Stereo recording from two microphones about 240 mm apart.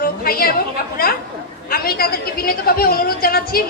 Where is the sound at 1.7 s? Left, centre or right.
Left.